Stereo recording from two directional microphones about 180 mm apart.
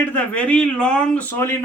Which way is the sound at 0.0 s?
10° left (ahead or behind).